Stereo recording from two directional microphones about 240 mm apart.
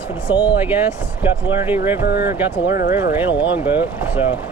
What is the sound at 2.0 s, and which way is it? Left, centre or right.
Speech, left.